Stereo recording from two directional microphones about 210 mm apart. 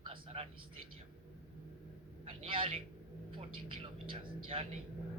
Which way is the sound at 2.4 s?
25° right (ahead or behind).